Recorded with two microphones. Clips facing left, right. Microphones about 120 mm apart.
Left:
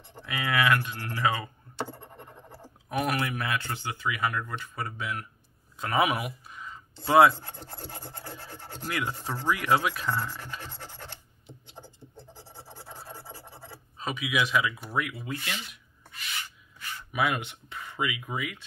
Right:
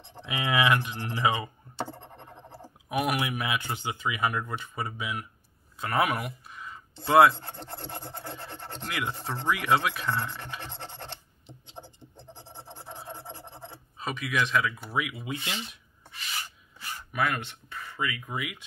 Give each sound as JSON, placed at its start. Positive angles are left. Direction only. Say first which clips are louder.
{"t": 0.2, "sound": "speech", "louder": "right 1 dB", "side_deg": -20}
{"t": 2.5, "sound": "speech", "louder": "right 1 dB", "side_deg": -10}
{"t": 5.8, "sound": "speech", "louder": "left 1 dB", "side_deg": 0}
{"t": 7.3, "sound": "speech", "louder": "right 3 dB", "side_deg": -70}
{"t": 8.8, "sound": "speech", "louder": "left 1 dB", "side_deg": 0}
{"t": 10.6, "sound": "speech", "louder": "right 2 dB", "side_deg": -65}
{"t": 11.4, "sound": "a sound", "louder": "right 2 dB", "side_deg": -25}
{"t": 13.9, "sound": "speech", "louder": "left 1 dB", "side_deg": 0}
{"t": 15.2, "sound": "speech", "louder": "right 1 dB", "side_deg": -20}
{"t": 16.3, "sound": "rub", "louder": "right 1 dB", "side_deg": -40}
{"t": 17.1, "sound": "speech", "louder": "left 1 dB", "side_deg": 10}
{"t": 18.3, "sound": "speech", "louder": "left 1 dB", "side_deg": -5}